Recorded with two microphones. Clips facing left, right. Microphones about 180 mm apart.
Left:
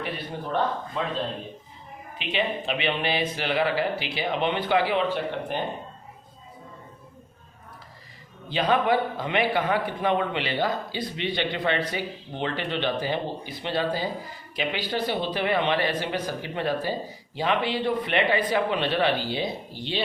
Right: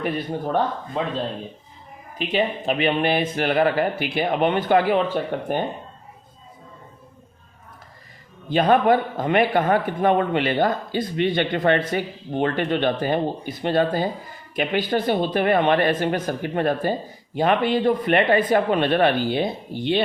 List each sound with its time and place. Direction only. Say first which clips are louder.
0.0 s a man's voice: right 7 dB; 45° right (ahead or behind)
2.1 s a man's voice: right 5 dB; 45° right (ahead or behind)
8.4 s a man's voice: right 6 dB; 50° right (ahead or behind)